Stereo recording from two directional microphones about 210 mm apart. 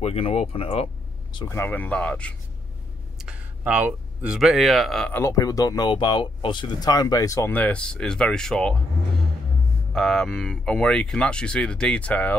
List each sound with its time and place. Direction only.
0.0 s speech: 30° left (ahead or behind)
1.3 s speech: 15° left (ahead or behind)
3.2 s speech: 5° right (ahead or behind)
9.9 s speech: centre (ahead or behind)